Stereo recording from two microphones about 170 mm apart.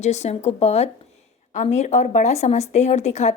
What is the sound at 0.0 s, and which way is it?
A woman's voice, 40° left (ahead or behind).